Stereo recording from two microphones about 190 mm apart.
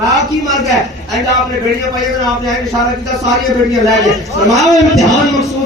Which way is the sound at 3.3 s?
Centre (ahead or behind).